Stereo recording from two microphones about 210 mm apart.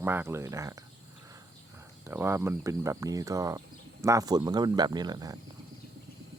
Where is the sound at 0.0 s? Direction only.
10° right (ahead or behind).